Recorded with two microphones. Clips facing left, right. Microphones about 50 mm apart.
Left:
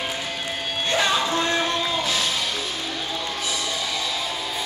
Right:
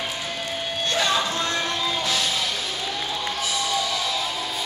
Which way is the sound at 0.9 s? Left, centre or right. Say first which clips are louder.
Left 2 dB; left.